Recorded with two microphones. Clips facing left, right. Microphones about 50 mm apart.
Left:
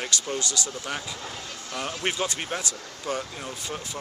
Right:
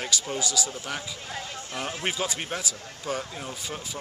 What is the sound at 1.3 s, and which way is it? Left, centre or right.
Speech, centre.